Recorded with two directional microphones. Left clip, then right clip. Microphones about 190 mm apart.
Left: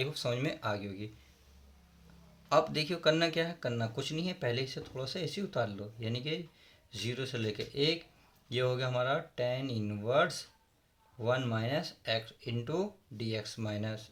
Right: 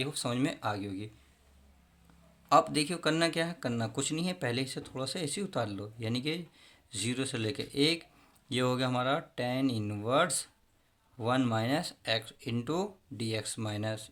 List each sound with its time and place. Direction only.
0.0 s speech: 25° right (ahead or behind)
2.5 s speech: 30° right (ahead or behind)